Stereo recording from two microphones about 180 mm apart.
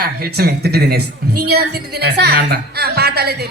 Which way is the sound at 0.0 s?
60° right (ahead or behind).